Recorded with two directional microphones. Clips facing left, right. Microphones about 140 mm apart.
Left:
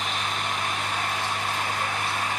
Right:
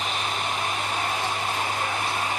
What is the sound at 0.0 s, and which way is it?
Vehicle, 20° right (ahead or behind).